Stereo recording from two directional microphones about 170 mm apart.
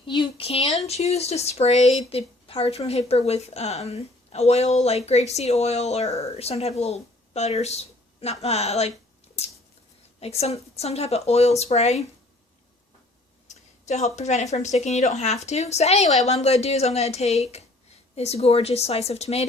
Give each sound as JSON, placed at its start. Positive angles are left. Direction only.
{"t": 0.0, "sound": "a woman's voice", "side_deg": 30}
{"t": 10.2, "sound": "a woman's voice", "side_deg": 40}
{"t": 13.5, "sound": "a woman's voice", "side_deg": 40}